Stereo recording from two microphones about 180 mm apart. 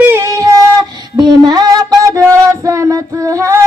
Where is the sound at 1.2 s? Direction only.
25° right (ahead or behind).